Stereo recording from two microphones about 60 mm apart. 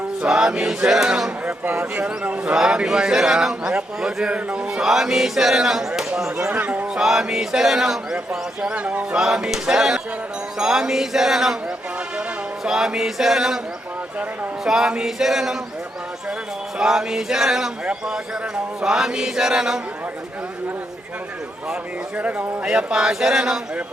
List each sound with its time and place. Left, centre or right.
0.3 s a man's voice: centre
2.4 s a man's voice: centre
6.5 s speech: right
7.0 s a man's voice: centre
9.1 s a man's voice: centre
12.6 s a man's voice: centre
14.6 s a man's voice: centre
16.7 s a man's voice: centre
22.2 s a man's voice: right
22.6 s a man's voice: centre